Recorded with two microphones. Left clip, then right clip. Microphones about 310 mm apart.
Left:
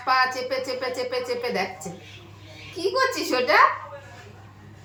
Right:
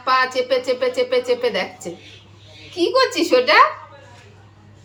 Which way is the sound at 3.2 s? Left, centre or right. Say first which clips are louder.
Right 6 dB; right.